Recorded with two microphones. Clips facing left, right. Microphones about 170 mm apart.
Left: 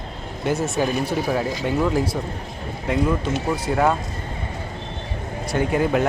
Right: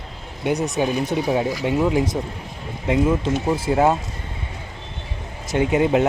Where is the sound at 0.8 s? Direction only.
20° right (ahead or behind).